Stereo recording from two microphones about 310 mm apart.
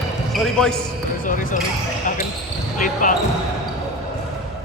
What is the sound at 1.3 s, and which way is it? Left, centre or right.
Speech, left.